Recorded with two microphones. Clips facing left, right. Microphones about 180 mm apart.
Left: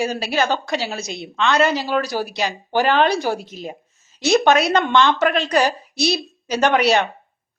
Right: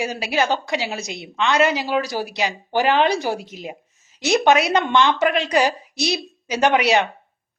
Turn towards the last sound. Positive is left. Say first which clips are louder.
# left 1 dB
turn(degrees=-15)  # may be behind; listen again after turning